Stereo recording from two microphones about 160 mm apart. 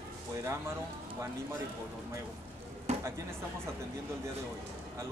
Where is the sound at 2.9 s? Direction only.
45° right (ahead or behind).